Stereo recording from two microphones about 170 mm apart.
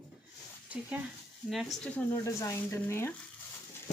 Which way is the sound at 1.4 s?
Centre (ahead or behind).